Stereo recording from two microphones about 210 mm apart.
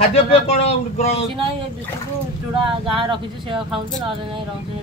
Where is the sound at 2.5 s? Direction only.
25° right (ahead or behind).